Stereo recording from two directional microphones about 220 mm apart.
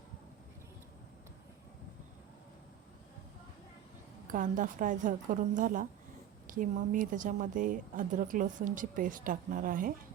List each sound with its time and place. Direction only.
4.3 s speech: 35° right (ahead or behind)